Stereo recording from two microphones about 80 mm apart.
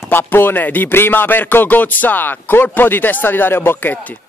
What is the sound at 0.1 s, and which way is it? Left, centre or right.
Speech, left.